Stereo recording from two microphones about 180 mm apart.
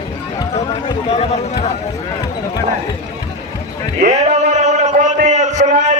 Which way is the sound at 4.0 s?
40° right (ahead or behind).